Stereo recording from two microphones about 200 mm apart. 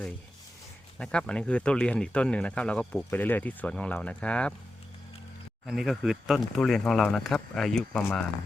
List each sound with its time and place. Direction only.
0.9 s speech: 5° left (ahead or behind)
5.6 s speech: centre (ahead or behind)